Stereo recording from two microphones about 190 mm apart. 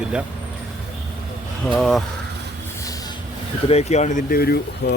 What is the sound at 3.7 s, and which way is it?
Speech, 35° left (ahead or behind).